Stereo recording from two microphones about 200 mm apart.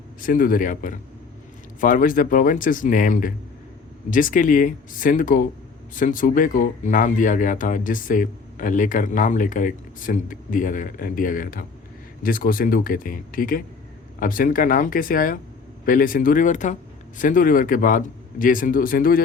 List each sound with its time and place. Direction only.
0.2 s speech: 45° left (ahead or behind)